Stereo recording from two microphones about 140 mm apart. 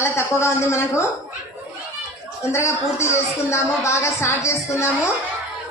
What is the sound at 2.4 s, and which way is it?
A woman's voice, 20° left (ahead or behind).